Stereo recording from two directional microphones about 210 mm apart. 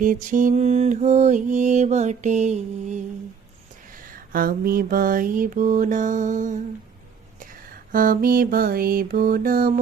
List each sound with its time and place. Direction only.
0.0 s mantra: 40° right (ahead or behind)
4.1 s mantra: 40° right (ahead or behind)
7.9 s mantra: 40° right (ahead or behind)